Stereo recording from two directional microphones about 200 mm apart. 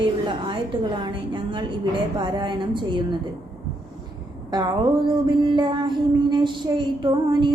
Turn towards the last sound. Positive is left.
turn(degrees=-25)  # may be behind; listen again after turning